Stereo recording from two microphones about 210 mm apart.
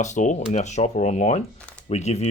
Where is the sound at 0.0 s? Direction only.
35° left (ahead or behind).